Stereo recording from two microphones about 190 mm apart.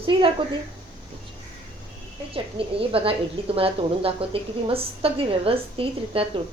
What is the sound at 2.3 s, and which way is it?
A woman's voice, 30° right (ahead or behind).